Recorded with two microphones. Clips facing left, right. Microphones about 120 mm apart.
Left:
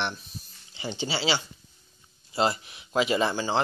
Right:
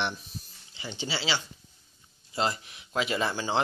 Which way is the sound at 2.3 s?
10° left (ahead or behind).